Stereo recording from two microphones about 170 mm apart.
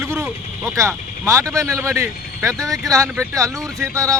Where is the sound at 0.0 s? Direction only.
15° right (ahead or behind).